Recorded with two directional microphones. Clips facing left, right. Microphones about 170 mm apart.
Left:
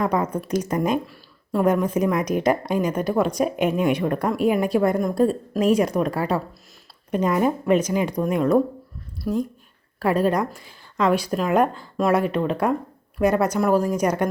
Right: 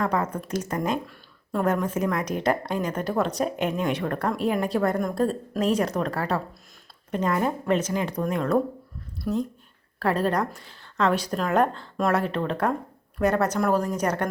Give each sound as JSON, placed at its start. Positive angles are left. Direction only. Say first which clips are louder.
{"t": 0.0, "sound": "a woman's voice", "louder": "left 3 dB", "side_deg": 15}